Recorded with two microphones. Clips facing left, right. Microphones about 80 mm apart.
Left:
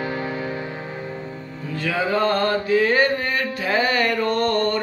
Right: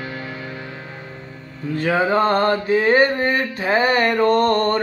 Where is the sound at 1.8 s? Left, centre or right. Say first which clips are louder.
Right 4 dB; right.